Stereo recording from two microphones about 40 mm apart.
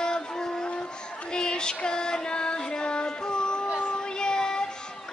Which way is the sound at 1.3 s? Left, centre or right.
Centre.